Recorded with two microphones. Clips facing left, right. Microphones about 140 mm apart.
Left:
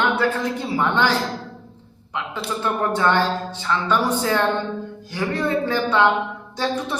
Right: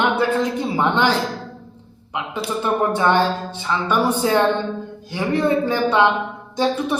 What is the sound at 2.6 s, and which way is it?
A woman's voice, 15° right (ahead or behind).